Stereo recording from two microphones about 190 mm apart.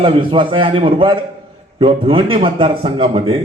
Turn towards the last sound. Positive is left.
turn(degrees=-30)  # may be behind; listen again after turning